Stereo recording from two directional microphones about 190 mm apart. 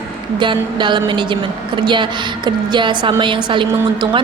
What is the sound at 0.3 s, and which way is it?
A woman's voice, 25° right (ahead or behind).